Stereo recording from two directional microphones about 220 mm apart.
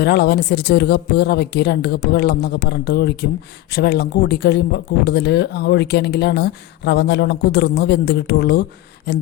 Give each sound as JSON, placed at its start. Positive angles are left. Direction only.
{"t": 0.0, "sound": "speech", "side_deg": 50}